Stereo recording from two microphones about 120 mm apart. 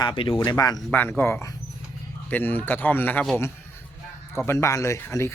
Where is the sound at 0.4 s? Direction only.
30° left (ahead or behind).